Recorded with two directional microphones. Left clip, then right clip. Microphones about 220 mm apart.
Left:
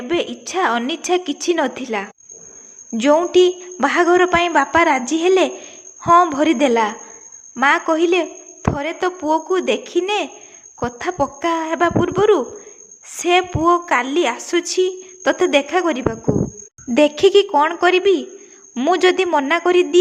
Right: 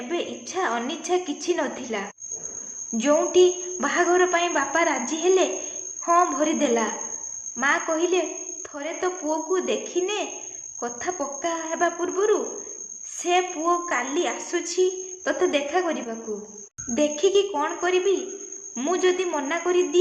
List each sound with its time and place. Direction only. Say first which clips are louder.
0.1 s a woman's voice: left 9 dB; 40° left (ahead or behind)